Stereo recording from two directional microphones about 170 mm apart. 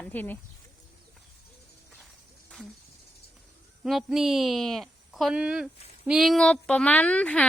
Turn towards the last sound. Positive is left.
turn(degrees=5)  # may be behind; listen again after turning